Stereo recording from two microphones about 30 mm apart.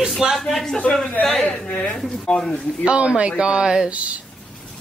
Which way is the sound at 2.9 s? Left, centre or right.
Right.